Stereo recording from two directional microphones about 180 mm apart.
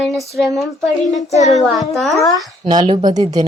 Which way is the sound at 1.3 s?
40° left (ahead or behind).